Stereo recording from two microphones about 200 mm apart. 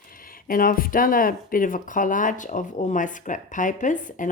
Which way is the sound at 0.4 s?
45° left (ahead or behind).